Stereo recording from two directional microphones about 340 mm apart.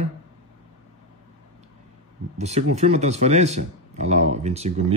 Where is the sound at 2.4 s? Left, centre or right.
Centre.